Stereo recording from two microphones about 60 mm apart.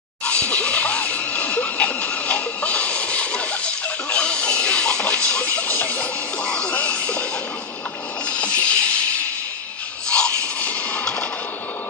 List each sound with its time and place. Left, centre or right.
0.2 s music: centre
6.7 s a sound: left
8.3 s music: centre
10.0 s rub: centre